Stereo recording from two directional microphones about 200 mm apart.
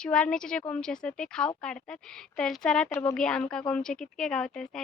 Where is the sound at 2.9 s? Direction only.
15° left (ahead or behind).